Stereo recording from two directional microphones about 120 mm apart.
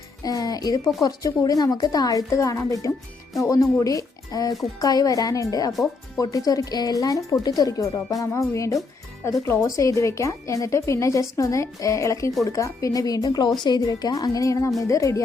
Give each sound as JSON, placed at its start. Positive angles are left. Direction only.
{"t": 0.2, "sound": "a woman's voice", "side_deg": 30}